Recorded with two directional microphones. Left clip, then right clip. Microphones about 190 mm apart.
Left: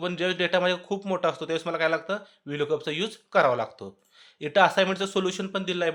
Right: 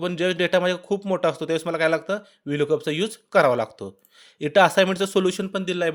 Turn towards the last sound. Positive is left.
turn(degrees=-45)  # may be behind; listen again after turning